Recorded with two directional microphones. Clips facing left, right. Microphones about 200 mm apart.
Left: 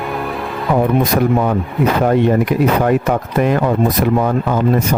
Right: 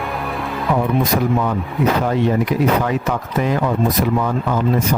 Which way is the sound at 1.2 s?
55° left (ahead or behind).